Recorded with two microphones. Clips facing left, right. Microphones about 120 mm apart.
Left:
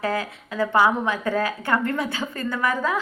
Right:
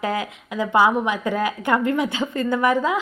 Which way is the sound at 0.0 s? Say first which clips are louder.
Right 1 dB; 15° right (ahead or behind).